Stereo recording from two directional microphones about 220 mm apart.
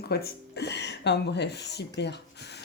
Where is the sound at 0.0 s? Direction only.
45° left (ahead or behind).